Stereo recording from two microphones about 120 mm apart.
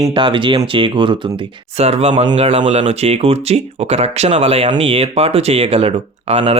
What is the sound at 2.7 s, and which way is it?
Speech, 65° right (ahead or behind).